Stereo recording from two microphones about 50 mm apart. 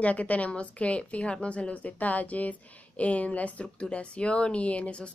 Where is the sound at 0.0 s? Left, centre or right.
Left.